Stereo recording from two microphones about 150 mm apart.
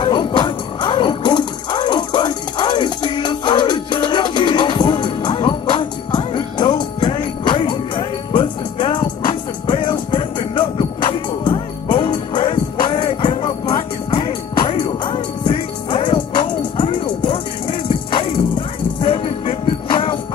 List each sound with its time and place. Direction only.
0.0 s music: 30° left (ahead or behind)